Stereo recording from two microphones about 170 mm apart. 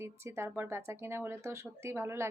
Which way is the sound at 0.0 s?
15° right (ahead or behind).